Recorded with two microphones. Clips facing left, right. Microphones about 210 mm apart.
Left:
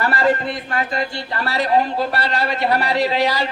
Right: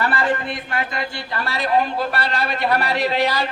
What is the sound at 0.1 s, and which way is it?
A man's voice, 30° left (ahead or behind).